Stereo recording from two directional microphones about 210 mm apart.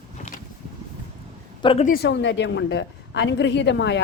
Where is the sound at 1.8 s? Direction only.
45° left (ahead or behind).